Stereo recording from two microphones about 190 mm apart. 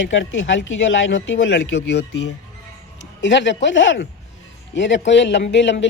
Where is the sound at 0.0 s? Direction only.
75° left (ahead or behind).